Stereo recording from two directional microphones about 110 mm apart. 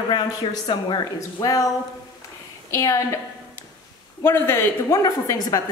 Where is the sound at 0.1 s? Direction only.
45° left (ahead or behind).